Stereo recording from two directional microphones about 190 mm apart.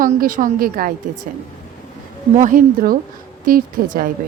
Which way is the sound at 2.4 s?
45° right (ahead or behind).